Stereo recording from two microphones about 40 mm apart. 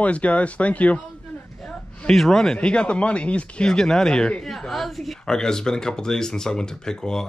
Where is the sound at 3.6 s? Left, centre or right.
Centre.